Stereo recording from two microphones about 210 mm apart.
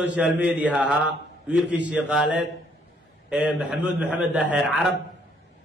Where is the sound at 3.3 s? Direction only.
5° right (ahead or behind).